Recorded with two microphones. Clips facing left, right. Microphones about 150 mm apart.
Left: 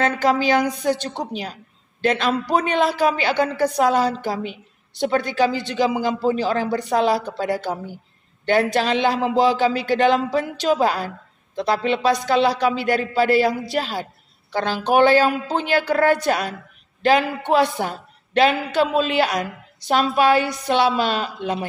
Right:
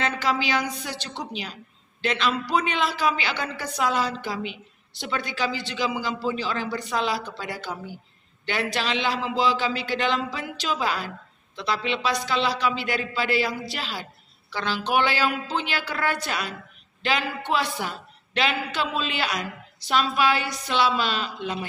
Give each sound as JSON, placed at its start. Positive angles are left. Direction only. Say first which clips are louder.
{"t": 0.0, "sound": "a man's voice", "louder": "left 7 dB", "side_deg": 50}